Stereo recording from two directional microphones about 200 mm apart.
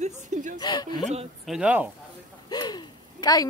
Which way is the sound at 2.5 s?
20° left (ahead or behind).